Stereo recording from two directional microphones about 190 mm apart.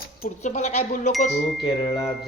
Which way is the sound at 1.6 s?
15° left (ahead or behind).